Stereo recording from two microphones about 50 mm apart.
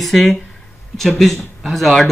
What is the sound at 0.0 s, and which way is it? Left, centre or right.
Speech, centre.